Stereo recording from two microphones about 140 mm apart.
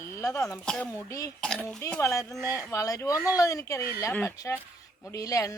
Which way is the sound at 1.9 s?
20° left (ahead or behind).